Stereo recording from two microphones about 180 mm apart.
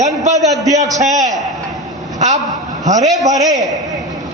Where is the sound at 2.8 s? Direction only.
40° right (ahead or behind).